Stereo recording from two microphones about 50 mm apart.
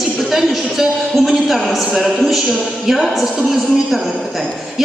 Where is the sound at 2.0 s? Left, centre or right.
Centre.